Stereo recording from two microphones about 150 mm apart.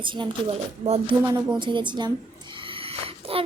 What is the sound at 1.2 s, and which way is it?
Speech, 15° right (ahead or behind).